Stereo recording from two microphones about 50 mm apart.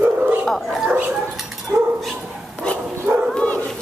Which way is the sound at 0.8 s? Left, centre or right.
Right.